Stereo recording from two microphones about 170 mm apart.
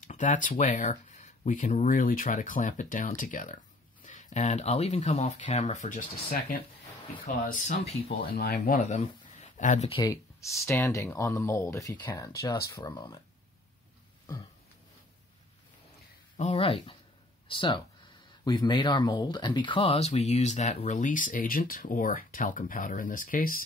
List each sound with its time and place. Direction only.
0.0 s speech: 50° left (ahead or behind)
7.6 s speech: 45° left (ahead or behind)
8.4 s speech: 60° left (ahead or behind); by 9.8 s 45° left (ahead or behind)
9.8 s speech: 30° left (ahead or behind)
10.7 s speech: 15° left (ahead or behind)
16.4 s speech: 30° left (ahead or behind); by 23.6 s 55° left (ahead or behind)